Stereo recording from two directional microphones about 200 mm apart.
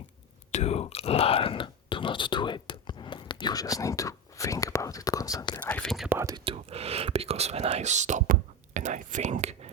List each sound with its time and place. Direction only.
0.5 s speech: 30° left (ahead or behind)
5.6 s speech: 5° left (ahead or behind)
6.1 s speech: 15° right (ahead or behind)
6.4 s speech: 30° right (ahead or behind)